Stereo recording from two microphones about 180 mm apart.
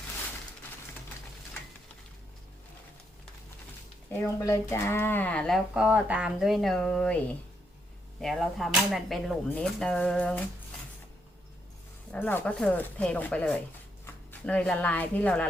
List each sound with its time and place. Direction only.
4.1 s speech: 15° left (ahead or behind)
8.2 s speech: centre (ahead or behind)
12.1 s speech: 10° left (ahead or behind)